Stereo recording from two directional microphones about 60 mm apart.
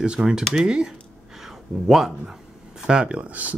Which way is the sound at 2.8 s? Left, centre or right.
Centre.